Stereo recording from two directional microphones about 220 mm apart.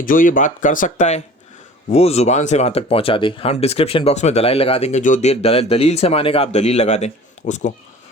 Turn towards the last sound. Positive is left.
turn(degrees=35)  # may be behind; listen again after turning